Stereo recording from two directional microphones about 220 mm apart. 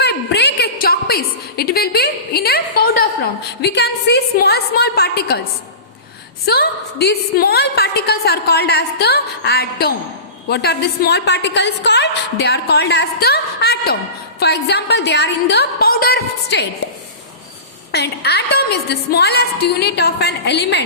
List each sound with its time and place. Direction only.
0.0 s a sound: 50° left (ahead or behind)
6.4 s a woman's voice: 45° left (ahead or behind)
17.9 s a woman's voice: 50° left (ahead or behind)